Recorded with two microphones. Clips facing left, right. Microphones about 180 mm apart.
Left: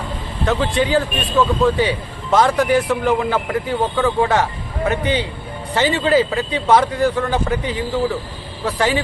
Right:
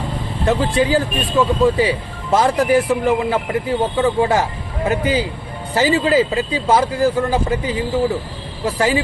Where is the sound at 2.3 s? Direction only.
30° right (ahead or behind).